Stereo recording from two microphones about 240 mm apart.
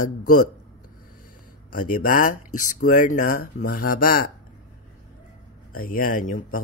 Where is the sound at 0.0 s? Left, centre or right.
Left.